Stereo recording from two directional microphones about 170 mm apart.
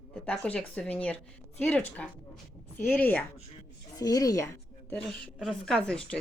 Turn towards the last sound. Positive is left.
turn(degrees=5)  # may be behind; listen again after turning